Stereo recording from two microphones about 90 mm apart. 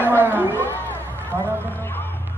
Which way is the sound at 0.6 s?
25° left (ahead or behind).